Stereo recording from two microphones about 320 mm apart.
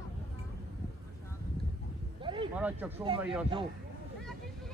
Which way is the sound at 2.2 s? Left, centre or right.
Centre.